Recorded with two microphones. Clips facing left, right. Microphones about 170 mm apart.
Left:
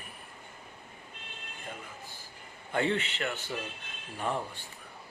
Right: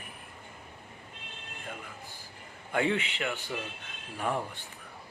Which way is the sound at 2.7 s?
10° right (ahead or behind).